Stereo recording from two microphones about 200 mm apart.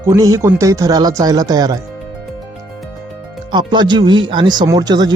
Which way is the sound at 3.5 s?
20° right (ahead or behind).